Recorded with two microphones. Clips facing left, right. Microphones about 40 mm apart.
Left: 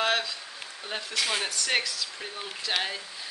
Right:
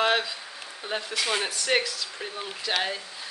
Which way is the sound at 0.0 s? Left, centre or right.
Centre.